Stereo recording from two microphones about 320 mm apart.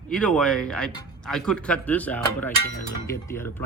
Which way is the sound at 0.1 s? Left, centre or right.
Centre.